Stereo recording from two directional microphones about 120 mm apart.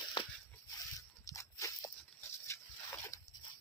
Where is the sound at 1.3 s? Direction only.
25° left (ahead or behind).